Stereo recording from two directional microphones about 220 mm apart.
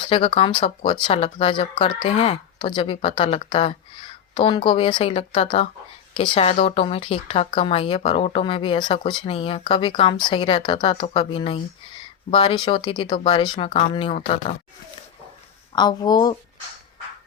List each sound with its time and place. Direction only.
0.0 s speech: 25° left (ahead or behind)
15.7 s speech: 20° left (ahead or behind)